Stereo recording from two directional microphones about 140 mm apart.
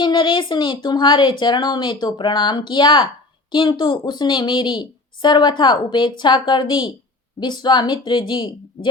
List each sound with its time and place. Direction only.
0.0 s a woman's voice: 35° left (ahead or behind)